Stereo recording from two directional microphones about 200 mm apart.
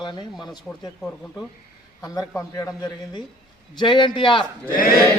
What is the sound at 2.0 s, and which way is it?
Speech, 15° left (ahead or behind).